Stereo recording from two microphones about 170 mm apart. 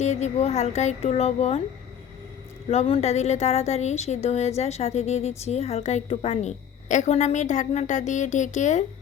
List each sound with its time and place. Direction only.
0.0 s a woman's voice: 40° left (ahead or behind)
2.6 s a woman's voice: 35° left (ahead or behind)